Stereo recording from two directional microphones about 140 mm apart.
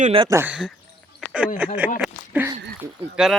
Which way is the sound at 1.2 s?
Centre (ahead or behind).